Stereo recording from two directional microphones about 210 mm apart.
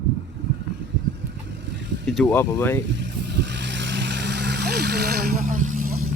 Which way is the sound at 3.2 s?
55° right (ahead or behind).